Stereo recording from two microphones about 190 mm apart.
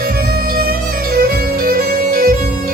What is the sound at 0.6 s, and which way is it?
Music, 55° right (ahead or behind).